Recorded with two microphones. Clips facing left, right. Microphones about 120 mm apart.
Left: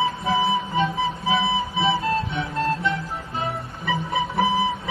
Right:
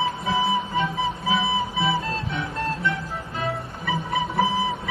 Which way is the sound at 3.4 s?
25° left (ahead or behind).